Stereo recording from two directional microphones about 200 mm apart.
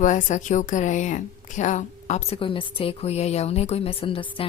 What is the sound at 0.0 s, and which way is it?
A woman's voice, 40° left (ahead or behind).